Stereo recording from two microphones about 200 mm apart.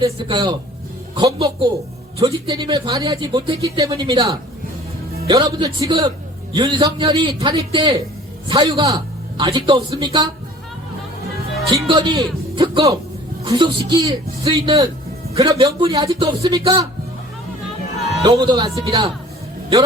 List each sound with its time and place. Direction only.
0.0 s speech: 25° right (ahead or behind)
11.9 s speech: 20° right (ahead or behind)
18.2 s speech: 20° right (ahead or behind)